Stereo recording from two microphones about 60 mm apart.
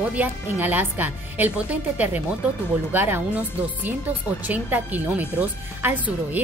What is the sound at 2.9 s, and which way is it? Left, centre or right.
A woman's voice, right.